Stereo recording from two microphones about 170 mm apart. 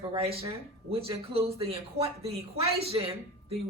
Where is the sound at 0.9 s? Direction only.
35° right (ahead or behind).